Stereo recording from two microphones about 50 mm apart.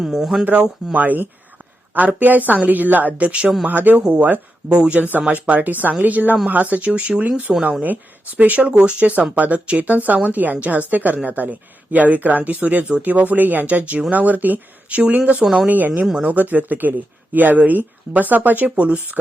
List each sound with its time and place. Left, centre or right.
0.0 s speech: centre
0.9 s a woman's voice: right